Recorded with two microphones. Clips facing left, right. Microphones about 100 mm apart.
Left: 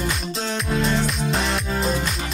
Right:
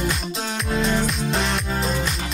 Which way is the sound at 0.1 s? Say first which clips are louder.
Left 1 dB; centre (ahead or behind).